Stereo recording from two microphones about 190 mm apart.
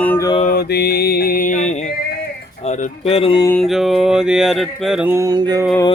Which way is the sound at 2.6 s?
35° left (ahead or behind).